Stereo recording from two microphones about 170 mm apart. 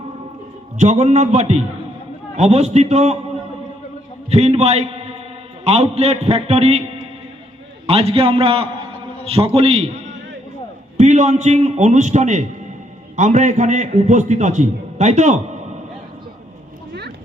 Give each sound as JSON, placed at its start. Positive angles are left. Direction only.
{"t": 0.8, "sound": "a man's voice", "side_deg": -45}
{"t": 4.3, "sound": "a man's voice", "side_deg": -40}